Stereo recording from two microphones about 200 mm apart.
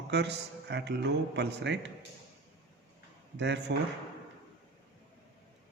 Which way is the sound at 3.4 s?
60° right (ahead or behind).